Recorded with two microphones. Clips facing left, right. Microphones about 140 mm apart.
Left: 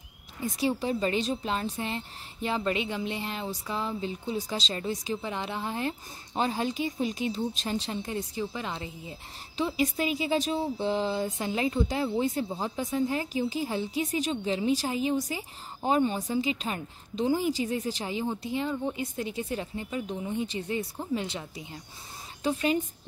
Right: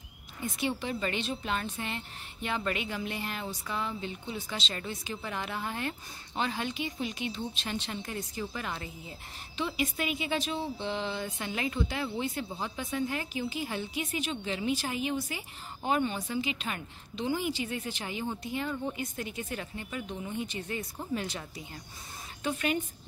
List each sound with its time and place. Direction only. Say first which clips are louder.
0.4 s a woman's voice: left 4 dB; 35° left (ahead or behind)
9.6 s a woman's voice: left 5 dB; 35° left (ahead or behind)